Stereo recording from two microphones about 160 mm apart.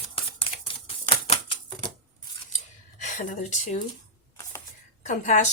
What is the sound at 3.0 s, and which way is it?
Speech, 50° left (ahead or behind).